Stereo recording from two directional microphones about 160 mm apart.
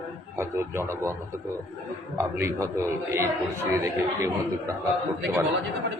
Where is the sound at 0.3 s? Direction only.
15° right (ahead or behind).